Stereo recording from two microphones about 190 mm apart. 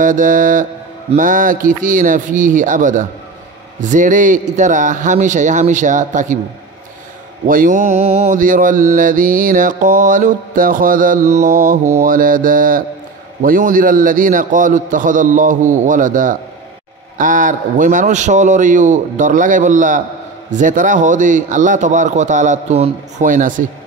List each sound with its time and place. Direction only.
0.0 s mantra: 45° right (ahead or behind)
3.8 s a man's voice: 40° right (ahead or behind)
7.4 s mantra: 45° right (ahead or behind)
20.5 s a man's voice: 45° right (ahead or behind)